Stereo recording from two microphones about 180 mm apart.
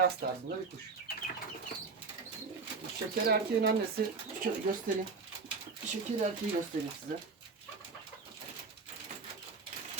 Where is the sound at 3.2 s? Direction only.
60° right (ahead or behind).